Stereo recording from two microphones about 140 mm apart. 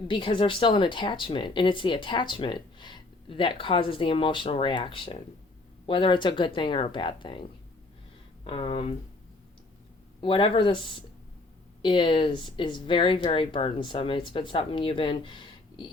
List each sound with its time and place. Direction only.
0.1 s speech: 35° left (ahead or behind)
8.4 s speech: 40° left (ahead or behind)
10.2 s speech: 40° left (ahead or behind)